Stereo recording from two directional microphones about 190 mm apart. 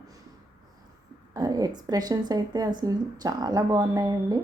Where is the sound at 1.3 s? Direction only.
20° right (ahead or behind).